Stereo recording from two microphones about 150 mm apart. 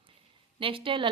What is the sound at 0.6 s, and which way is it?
Speech, 35° right (ahead or behind).